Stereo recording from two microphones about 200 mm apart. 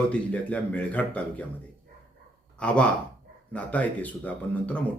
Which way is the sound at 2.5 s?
5° left (ahead or behind).